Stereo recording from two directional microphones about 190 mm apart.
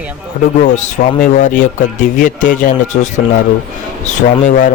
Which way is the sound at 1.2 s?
40° left (ahead or behind).